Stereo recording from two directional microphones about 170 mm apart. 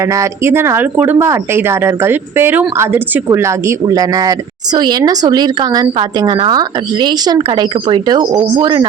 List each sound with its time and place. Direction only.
0.0 s speech: 15° right (ahead or behind)